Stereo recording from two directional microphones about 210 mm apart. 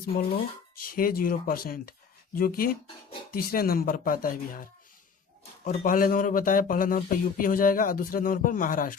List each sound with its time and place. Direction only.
0.9 s speech: 45° left (ahead or behind)
5.6 s speech: 40° left (ahead or behind)